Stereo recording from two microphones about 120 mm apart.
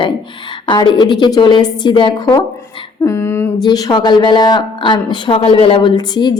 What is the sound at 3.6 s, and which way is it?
A woman's voice, 35° left (ahead or behind).